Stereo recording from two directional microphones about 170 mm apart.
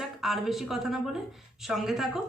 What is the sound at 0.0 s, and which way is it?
Speech, centre (ahead or behind).